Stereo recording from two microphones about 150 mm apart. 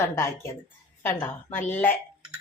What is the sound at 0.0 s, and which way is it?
Speech, 20° left (ahead or behind).